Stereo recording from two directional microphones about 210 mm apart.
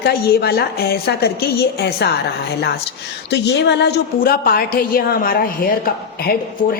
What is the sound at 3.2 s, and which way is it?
A woman's voice, 55° left (ahead or behind).